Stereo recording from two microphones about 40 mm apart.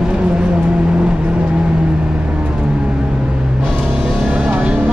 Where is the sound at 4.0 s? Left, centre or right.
Right.